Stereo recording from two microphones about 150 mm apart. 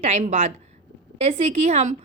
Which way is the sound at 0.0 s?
50° right (ahead or behind).